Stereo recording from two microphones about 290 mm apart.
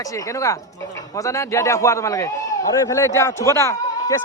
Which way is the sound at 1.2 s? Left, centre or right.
Centre.